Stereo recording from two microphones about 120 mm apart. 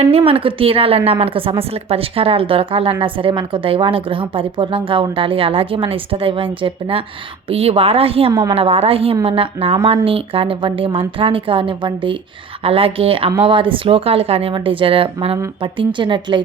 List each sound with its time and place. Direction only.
0.0 s speech: 55° right (ahead or behind)
12.6 s speech: 50° right (ahead or behind)